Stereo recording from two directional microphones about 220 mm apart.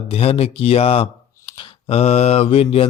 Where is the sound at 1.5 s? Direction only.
20° left (ahead or behind).